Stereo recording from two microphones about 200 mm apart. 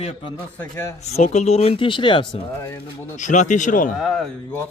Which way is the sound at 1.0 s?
35° left (ahead or behind).